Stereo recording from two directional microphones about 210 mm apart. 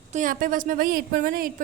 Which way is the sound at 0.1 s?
40° right (ahead or behind).